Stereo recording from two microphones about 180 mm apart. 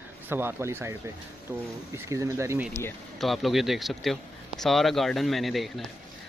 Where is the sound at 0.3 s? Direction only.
10° right (ahead or behind).